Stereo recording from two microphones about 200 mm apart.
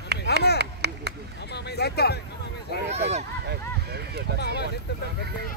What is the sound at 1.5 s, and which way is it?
Speech, 55° left (ahead or behind).